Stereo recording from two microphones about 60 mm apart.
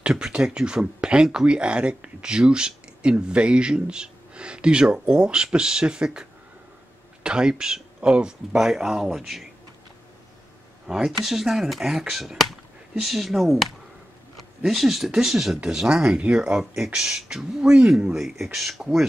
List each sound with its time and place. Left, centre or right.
0.0 s speech: centre
7.2 s speech: centre
10.9 s speech: centre
14.3 s a sound: centre
15.0 s speech: centre